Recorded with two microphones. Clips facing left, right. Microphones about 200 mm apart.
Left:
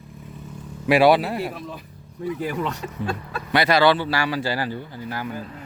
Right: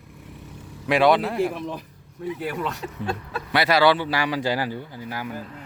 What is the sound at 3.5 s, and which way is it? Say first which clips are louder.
Speech: left 1 dB; 5° right (ahead or behind).